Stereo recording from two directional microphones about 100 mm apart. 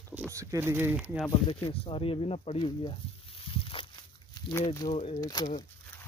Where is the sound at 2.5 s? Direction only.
55° left (ahead or behind).